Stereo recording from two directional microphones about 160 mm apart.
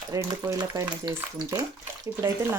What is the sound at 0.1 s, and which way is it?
Speech, 20° right (ahead or behind).